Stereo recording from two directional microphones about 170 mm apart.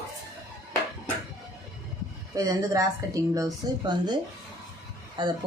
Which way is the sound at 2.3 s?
20° right (ahead or behind).